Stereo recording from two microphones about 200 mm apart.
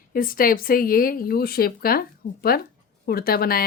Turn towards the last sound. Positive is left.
turn(degrees=50)  # may be behind; listen again after turning